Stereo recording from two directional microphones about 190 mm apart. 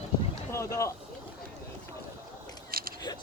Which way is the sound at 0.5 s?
15° left (ahead or behind).